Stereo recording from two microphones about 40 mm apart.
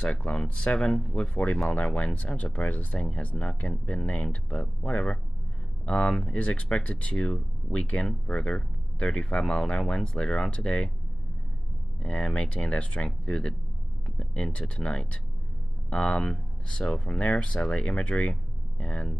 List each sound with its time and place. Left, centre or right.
0.0 s speech: left
7.7 s speech: left
12.1 s speech: left